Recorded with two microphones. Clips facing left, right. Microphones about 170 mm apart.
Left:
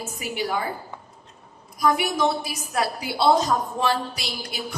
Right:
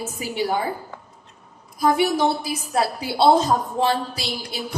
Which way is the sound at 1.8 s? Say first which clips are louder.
Right 3 dB; 30° right (ahead or behind).